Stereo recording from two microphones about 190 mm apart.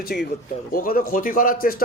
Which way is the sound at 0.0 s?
55° left (ahead or behind).